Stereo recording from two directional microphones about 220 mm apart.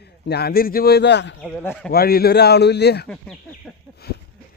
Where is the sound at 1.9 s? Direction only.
45° left (ahead or behind).